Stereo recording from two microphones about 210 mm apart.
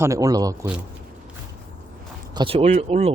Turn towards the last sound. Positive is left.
turn(degrees=-30)  # may be behind; listen again after turning